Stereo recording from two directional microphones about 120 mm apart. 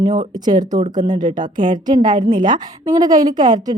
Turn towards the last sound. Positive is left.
turn(degrees=-35)  # may be behind; listen again after turning